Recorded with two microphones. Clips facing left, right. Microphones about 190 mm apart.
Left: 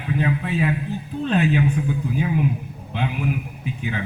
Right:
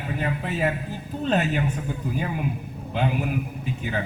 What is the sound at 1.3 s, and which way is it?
Speech, 45° right (ahead or behind).